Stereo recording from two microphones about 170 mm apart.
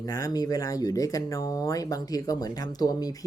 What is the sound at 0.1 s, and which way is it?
Speech, 20° left (ahead or behind).